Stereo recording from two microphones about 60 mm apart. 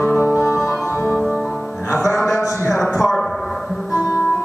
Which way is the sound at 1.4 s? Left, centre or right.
Centre.